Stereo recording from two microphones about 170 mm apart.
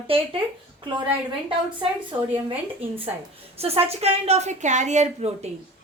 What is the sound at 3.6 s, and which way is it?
A woman's voice, 35° right (ahead or behind).